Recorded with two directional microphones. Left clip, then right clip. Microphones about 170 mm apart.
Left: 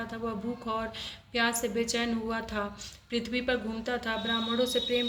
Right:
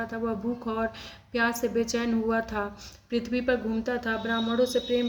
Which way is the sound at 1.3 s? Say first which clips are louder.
Right 3 dB; 40° right (ahead or behind).